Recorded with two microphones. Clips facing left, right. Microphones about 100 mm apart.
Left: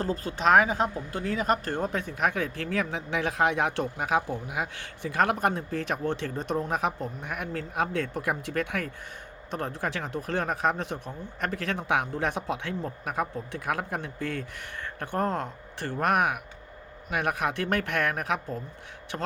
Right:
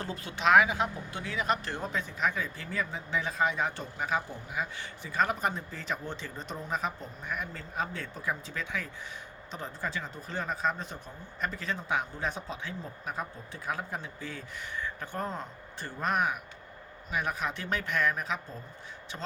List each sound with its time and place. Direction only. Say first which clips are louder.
0.0 s speech: left 4 dB; 40° left (ahead or behind); by 18.6 s 60° left (ahead or behind)